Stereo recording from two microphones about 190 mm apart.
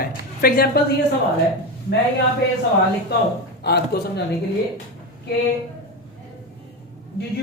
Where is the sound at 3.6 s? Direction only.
60° left (ahead or behind).